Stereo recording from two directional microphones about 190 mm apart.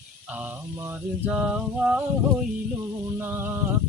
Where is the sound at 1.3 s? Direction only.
5° right (ahead or behind).